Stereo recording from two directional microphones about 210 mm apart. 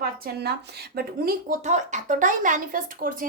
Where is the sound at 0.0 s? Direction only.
50° right (ahead or behind).